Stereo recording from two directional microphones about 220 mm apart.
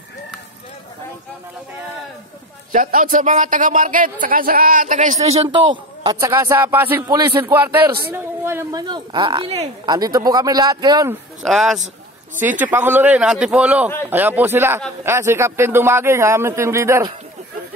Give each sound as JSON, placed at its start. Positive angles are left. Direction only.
{"t": 2.7, "sound": "a man's voice", "side_deg": -40}
{"t": 5.7, "sound": "a man's voice", "side_deg": -15}
{"t": 11.4, "sound": "a man's voice", "side_deg": 0}